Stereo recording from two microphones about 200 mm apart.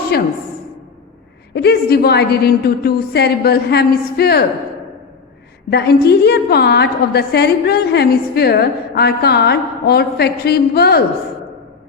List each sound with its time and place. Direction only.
0.1 s a woman's voice: 50° left (ahead or behind)
1.5 s a woman's voice: 50° left (ahead or behind)
5.7 s a woman's voice: 55° left (ahead or behind)